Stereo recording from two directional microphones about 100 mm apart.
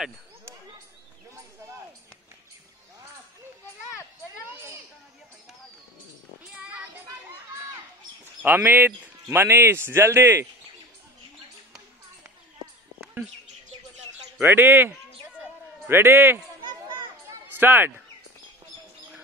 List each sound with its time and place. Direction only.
6.5 s child singing: 10° right (ahead or behind)
8.4 s speech: 20° right (ahead or behind)
14.4 s speech: 20° right (ahead or behind)
15.9 s speech: 20° right (ahead or behind)
17.3 s a sound: 20° right (ahead or behind)